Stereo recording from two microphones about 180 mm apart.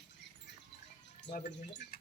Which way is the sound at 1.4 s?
75° left (ahead or behind).